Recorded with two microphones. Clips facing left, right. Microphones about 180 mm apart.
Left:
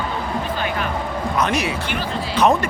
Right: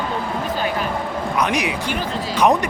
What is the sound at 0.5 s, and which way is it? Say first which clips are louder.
Music: right 4 dB; 40° right (ahead or behind).